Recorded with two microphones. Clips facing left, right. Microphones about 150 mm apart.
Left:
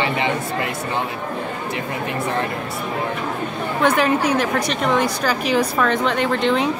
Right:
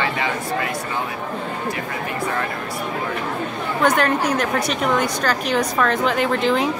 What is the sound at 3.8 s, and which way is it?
A woman's voice, centre (ahead or behind).